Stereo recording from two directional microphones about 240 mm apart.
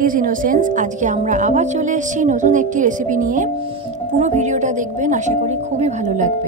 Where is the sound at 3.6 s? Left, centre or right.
Right.